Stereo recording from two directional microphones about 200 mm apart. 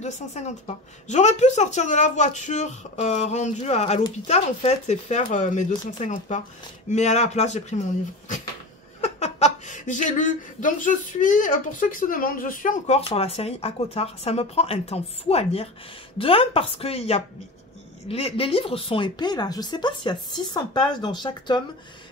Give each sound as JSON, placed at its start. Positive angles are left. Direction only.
{"t": 0.0, "sound": "speech", "side_deg": 35}
{"t": 9.0, "sound": "speech", "side_deg": 35}